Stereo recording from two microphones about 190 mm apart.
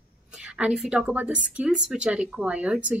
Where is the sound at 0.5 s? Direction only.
5° right (ahead or behind).